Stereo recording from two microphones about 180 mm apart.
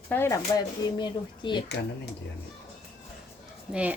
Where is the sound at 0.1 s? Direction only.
10° left (ahead or behind).